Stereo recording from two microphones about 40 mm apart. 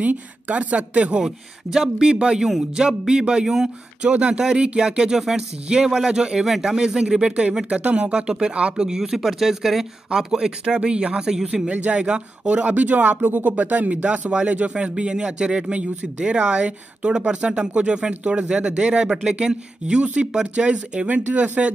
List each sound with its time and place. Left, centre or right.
0.0 s speech: right
1.2 s speech: centre; by 4.4 s right
4.4 s speech: centre
21.1 s speech: right